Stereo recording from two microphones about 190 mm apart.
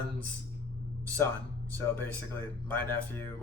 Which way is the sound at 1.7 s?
10° left (ahead or behind).